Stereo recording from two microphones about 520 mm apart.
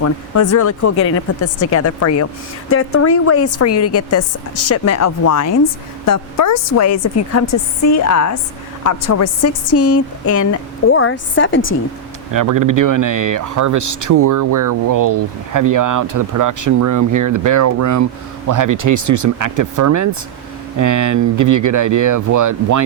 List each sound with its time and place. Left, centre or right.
0.0 s a woman's voice: left
12.3 s speech: right